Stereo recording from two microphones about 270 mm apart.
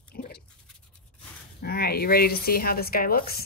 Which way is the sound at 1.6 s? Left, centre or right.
Left.